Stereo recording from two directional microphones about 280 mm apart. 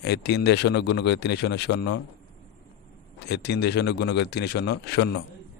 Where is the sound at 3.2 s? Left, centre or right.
Left.